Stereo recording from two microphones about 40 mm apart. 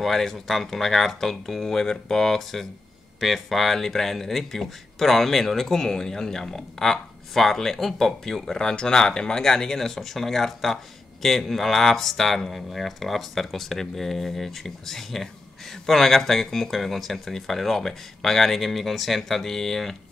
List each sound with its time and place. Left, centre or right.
0.0 s speech: centre